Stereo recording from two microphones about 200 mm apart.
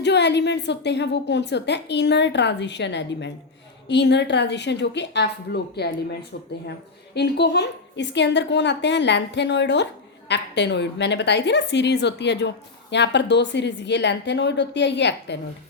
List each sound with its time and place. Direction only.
0.0 s a woman's voice: 60° left (ahead or behind)